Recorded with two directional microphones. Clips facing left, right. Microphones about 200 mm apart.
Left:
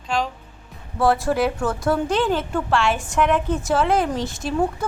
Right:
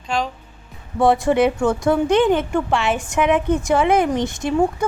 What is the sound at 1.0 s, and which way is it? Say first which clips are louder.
Speech: right 4 dB; centre (ahead or behind).